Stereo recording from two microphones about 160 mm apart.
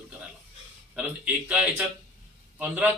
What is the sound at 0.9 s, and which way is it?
Speech, 10° right (ahead or behind).